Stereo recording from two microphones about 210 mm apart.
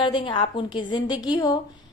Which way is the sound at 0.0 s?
25° left (ahead or behind).